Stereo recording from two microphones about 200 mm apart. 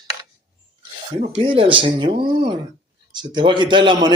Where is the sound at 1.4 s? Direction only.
25° right (ahead or behind).